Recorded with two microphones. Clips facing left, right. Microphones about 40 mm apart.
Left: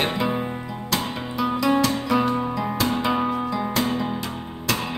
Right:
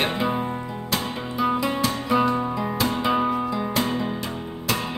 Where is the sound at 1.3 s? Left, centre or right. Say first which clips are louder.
Even; right.